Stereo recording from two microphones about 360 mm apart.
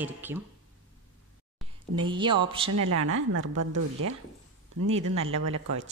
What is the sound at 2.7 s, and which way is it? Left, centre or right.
Speech, right.